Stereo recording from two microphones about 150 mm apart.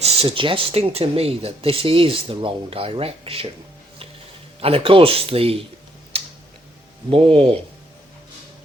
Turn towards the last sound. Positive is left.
turn(degrees=-35)  # may be behind; listen again after turning